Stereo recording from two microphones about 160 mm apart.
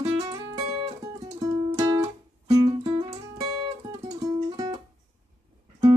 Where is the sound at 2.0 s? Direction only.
40° right (ahead or behind).